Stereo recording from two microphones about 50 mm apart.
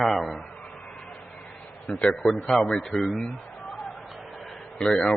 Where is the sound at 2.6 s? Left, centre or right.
Centre.